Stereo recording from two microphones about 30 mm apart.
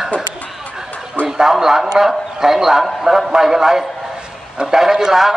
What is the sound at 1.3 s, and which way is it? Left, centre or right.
A man's voice, centre.